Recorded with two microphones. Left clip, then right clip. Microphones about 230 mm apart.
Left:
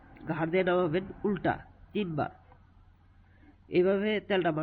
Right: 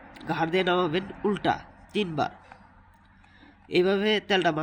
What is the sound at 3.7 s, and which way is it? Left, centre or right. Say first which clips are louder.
Speech: right 3 dB; centre.